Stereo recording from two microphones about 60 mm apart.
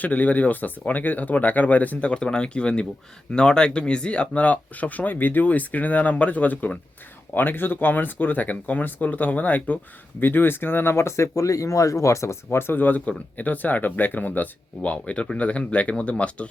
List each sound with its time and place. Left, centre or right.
0.0 s speech: left
10.2 s speech: left